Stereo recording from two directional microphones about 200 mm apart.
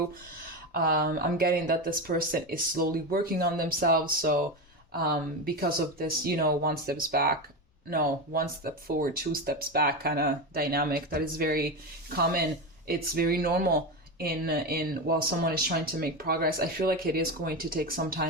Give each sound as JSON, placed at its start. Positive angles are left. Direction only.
{"t": 0.7, "sound": "speech", "side_deg": -50}
{"t": 5.5, "sound": "speech", "side_deg": -50}